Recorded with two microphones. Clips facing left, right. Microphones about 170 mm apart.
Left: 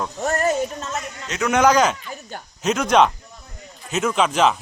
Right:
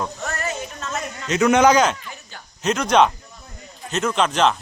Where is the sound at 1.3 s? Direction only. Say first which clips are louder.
Right 2 dB; centre (ahead or behind).